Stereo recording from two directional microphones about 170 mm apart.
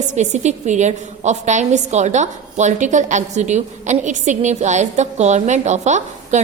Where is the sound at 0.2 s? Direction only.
45° right (ahead or behind).